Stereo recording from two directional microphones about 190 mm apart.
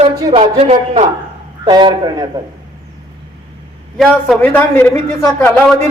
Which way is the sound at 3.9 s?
Centre (ahead or behind).